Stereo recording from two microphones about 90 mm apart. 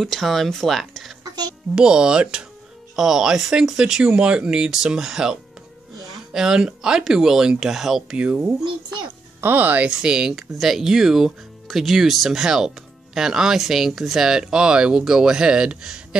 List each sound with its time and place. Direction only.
0.0 s speech: centre (ahead or behind)
1.2 s music: 50° right (ahead or behind)
1.8 s speech: 10° right (ahead or behind)
9.4 s speech: 20° right (ahead or behind)